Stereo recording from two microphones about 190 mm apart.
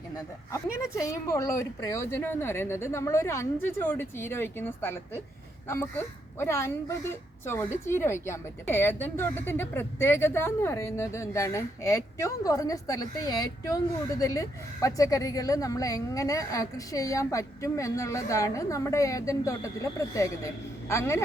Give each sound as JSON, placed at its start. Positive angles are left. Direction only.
{"t": 0.5, "sound": "a woman's voice", "side_deg": 15}